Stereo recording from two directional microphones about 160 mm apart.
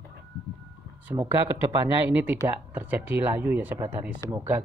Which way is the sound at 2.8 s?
10° right (ahead or behind).